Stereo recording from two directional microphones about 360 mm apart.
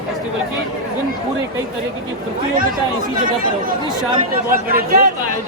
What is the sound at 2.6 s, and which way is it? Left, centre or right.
Speech, right.